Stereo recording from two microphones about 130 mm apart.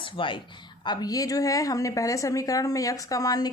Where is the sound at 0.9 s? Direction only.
30° left (ahead or behind).